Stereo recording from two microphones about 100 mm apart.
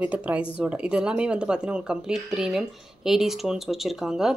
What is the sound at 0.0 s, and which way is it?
Speech, 15° right (ahead or behind).